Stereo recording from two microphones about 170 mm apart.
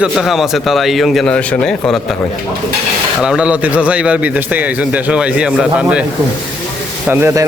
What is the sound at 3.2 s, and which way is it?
A man's voice, 5° right (ahead or behind).